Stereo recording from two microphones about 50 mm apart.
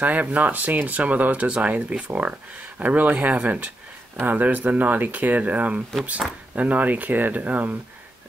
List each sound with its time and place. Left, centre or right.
0.0 s speech: right